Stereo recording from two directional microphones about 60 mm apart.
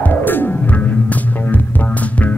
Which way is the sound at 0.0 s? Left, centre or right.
Left.